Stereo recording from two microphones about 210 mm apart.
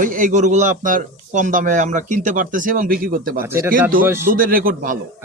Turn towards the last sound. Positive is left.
turn(degrees=-40)  # may be behind; listen again after turning